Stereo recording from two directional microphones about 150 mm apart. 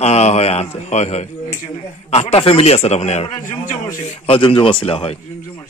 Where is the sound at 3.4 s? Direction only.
60° left (ahead or behind).